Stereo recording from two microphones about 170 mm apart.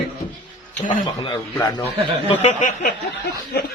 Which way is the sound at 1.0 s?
30° left (ahead or behind).